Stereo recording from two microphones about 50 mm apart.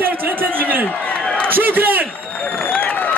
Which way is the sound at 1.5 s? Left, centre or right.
Right.